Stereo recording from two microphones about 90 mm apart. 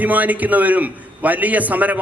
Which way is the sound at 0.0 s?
15° right (ahead or behind).